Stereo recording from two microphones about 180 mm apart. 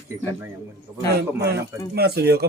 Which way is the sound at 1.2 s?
65° right (ahead or behind).